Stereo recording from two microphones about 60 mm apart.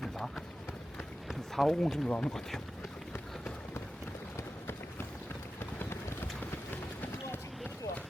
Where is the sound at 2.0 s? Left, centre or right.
Left.